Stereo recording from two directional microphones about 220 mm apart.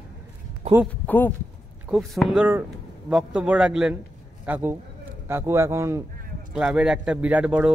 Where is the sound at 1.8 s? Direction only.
5° right (ahead or behind).